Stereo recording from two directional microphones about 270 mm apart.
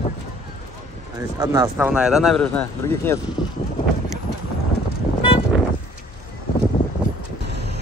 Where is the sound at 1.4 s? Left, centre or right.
Centre.